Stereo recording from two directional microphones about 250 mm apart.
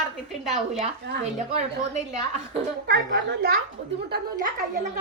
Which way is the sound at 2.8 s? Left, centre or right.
Right.